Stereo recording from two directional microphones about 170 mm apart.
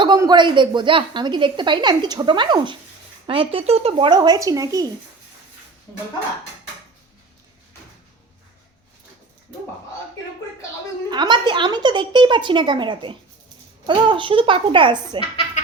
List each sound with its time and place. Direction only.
0.0 s a woman's voice: 25° right (ahead or behind)
11.1 s a woman's voice: 25° right (ahead or behind)